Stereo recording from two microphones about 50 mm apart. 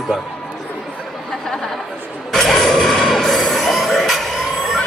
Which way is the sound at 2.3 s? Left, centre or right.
Centre.